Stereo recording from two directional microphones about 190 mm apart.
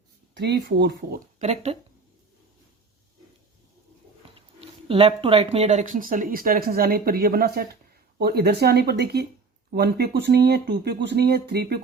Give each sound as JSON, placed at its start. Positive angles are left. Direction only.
{"t": 0.3, "sound": "speech", "side_deg": -60}
{"t": 1.4, "sound": "speech", "side_deg": -35}
{"t": 4.4, "sound": "speech", "side_deg": -30}